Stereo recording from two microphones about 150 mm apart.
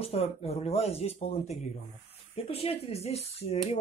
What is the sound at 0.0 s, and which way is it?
Speech, 40° left (ahead or behind).